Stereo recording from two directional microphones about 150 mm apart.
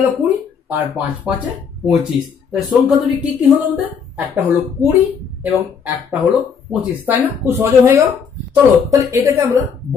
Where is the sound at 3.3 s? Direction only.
10° right (ahead or behind).